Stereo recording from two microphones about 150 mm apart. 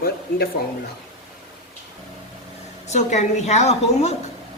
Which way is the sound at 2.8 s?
50° left (ahead or behind).